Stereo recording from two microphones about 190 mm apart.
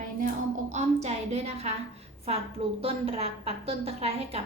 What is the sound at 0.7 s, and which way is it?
A woman's voice, 35° right (ahead or behind).